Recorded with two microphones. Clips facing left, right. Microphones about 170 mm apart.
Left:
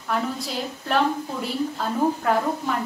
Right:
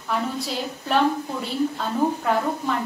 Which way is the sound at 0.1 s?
Centre (ahead or behind).